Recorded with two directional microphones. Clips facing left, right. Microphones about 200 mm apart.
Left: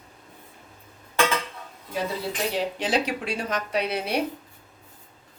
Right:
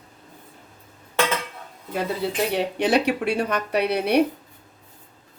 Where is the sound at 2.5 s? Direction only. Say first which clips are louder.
Right 5 dB; 65° right (ahead or behind).